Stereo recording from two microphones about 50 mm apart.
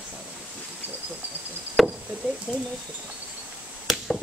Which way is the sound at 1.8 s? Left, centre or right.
Centre.